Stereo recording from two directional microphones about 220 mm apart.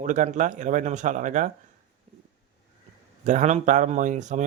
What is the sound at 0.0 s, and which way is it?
Speech, 35° right (ahead or behind).